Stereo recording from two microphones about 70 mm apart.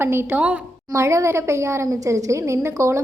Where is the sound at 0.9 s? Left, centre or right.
Right.